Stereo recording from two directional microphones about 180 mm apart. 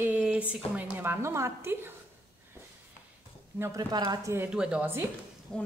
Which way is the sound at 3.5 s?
15° right (ahead or behind).